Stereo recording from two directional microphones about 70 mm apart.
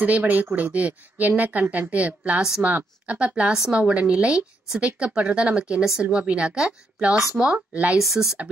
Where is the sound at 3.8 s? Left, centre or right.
Centre.